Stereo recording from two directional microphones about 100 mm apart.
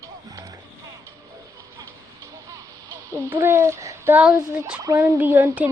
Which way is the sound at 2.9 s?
30° right (ahead or behind).